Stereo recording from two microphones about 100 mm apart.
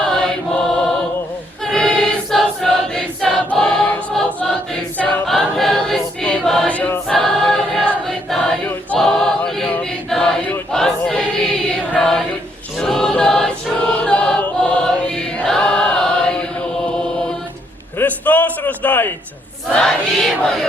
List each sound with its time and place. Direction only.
0.1 s choir: 5° left (ahead or behind)
6.2 s choir: 15° left (ahead or behind)
6.5 s choir: 5° left (ahead or behind)
6.7 s choir: 15° left (ahead or behind)
7.1 s choir: 5° left (ahead or behind)
17.9 s a sound: 15° left (ahead or behind)
19.7 s a sound: 5° left (ahead or behind)